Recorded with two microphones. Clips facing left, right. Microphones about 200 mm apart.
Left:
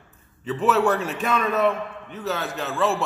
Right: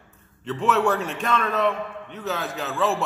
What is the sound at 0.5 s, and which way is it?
A man's voice, centre (ahead or behind).